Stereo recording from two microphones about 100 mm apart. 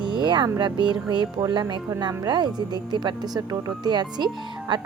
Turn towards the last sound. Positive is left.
turn(degrees=-45)  # may be behind; listen again after turning